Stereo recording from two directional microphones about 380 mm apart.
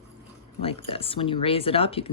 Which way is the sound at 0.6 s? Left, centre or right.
Centre.